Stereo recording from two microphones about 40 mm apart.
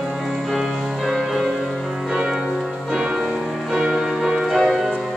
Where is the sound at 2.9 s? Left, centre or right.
Centre.